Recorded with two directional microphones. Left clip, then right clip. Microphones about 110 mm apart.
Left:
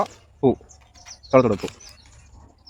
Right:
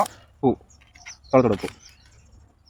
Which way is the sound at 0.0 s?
15° left (ahead or behind).